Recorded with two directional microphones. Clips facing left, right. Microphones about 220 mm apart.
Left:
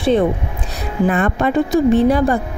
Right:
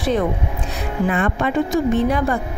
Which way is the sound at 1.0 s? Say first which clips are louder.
Left 4 dB; 40° left (ahead or behind).